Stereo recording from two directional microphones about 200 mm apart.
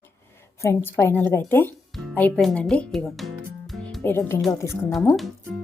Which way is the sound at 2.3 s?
Centre (ahead or behind).